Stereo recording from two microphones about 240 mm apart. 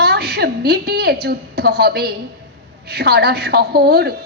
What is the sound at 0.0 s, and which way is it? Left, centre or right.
A woman's voice, right.